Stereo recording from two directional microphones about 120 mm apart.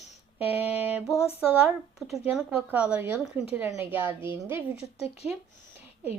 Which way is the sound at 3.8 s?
15° right (ahead or behind).